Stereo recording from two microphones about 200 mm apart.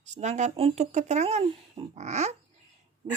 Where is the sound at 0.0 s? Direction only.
35° right (ahead or behind).